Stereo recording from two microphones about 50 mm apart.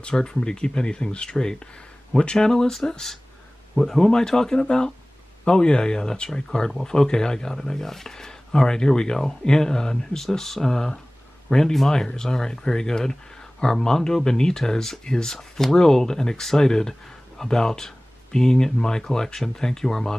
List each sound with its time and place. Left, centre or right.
0.0 s speech: centre